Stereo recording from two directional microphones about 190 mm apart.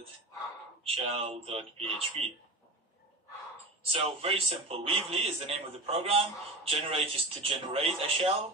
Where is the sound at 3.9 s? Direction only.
30° right (ahead or behind).